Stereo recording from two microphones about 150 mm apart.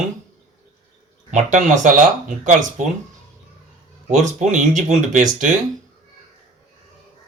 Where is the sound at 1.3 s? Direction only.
55° right (ahead or behind).